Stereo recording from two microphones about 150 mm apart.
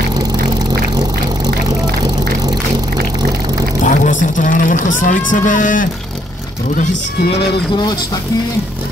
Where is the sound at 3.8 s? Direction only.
60° left (ahead or behind).